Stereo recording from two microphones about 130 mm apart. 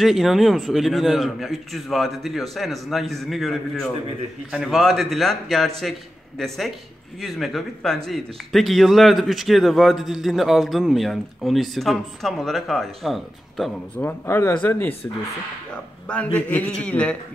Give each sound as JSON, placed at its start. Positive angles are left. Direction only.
{"t": 0.0, "sound": "a man's voice", "side_deg": 0}
{"t": 14.2, "sound": "a man's voice", "side_deg": 20}
{"t": 16.3, "sound": "a man's voice", "side_deg": 10}